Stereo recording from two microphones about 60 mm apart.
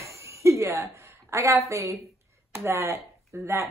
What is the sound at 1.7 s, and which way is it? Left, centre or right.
Speech, right.